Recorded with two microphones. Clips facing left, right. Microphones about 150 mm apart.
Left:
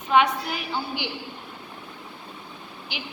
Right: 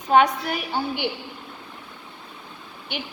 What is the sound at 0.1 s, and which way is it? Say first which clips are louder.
Speech: right 3 dB; 50° right (ahead or behind).